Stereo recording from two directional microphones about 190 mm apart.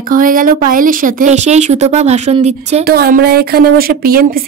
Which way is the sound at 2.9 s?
50° right (ahead or behind).